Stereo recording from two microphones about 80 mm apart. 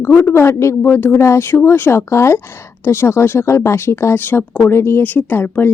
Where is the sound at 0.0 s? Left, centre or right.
Left.